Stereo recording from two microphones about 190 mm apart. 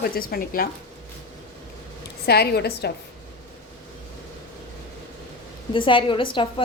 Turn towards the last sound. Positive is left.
turn(degrees=25)  # may be behind; listen again after turning